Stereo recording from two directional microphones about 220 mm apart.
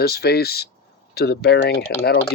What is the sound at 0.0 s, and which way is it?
Speech, 45° left (ahead or behind).